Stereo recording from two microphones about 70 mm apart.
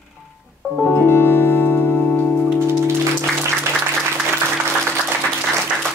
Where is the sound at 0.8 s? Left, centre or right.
Left.